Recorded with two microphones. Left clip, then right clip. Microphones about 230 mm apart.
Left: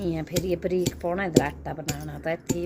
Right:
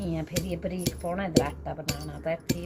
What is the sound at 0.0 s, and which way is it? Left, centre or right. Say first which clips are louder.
Speech: left 5 dB; left.